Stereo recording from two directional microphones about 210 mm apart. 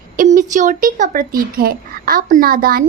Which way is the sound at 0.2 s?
40° right (ahead or behind).